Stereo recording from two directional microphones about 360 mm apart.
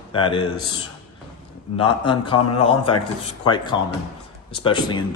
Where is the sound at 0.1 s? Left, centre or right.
Centre.